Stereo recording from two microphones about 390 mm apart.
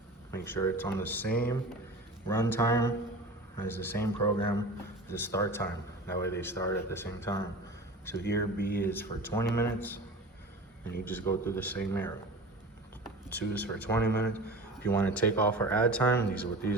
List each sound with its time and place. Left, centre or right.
0.3 s speech: centre
8.2 s speech: left
8.8 s speech: centre
11.0 s speech: centre
13.3 s speech: centre
14.0 s speech: left
14.3 s speech: centre